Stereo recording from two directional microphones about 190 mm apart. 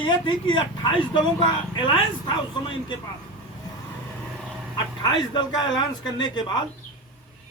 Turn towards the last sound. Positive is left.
turn(degrees=25)  # may be behind; listen again after turning